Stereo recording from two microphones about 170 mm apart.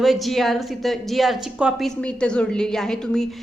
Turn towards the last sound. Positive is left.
turn(degrees=5)  # may be behind; listen again after turning